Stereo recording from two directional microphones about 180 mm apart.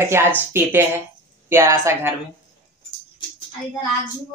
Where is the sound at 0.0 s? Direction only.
15° right (ahead or behind).